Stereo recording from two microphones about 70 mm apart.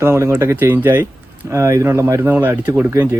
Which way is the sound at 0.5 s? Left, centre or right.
Right.